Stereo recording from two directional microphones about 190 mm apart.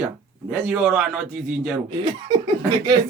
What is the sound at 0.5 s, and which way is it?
A man's voice, 5° right (ahead or behind).